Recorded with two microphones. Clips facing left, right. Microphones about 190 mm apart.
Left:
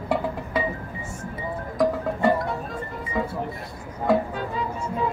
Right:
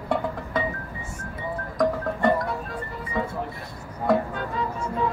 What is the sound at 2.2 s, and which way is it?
Music, 5° left (ahead or behind).